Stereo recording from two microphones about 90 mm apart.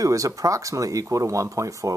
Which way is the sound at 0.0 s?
40° right (ahead or behind).